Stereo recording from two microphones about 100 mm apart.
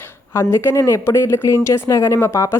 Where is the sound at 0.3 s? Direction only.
25° left (ahead or behind).